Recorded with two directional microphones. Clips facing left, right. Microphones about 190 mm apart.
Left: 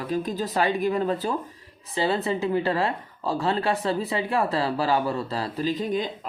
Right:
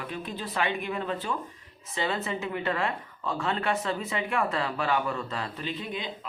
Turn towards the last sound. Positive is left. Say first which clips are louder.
# left 8 dB
turn(degrees=45)  # may be behind; listen again after turning